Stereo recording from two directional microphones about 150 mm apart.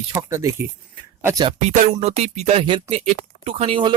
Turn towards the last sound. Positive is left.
turn(degrees=-35)  # may be behind; listen again after turning